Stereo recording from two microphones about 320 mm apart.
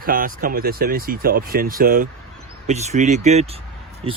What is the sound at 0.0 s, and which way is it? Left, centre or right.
Speech, right.